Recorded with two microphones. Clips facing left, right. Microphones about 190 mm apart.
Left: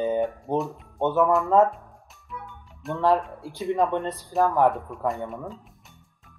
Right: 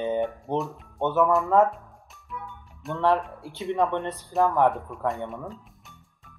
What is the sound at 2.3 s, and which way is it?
Music, centre (ahead or behind).